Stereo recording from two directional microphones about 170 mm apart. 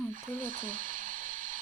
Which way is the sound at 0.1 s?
50° right (ahead or behind).